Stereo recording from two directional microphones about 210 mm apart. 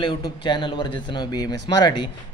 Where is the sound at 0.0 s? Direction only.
20° left (ahead or behind).